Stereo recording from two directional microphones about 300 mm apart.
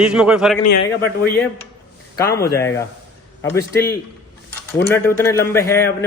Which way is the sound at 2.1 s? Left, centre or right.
Centre.